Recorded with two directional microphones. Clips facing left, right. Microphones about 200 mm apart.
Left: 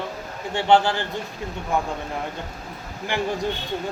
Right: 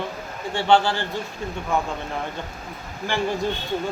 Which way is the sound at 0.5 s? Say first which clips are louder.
Left 1 dB; 20° left (ahead or behind).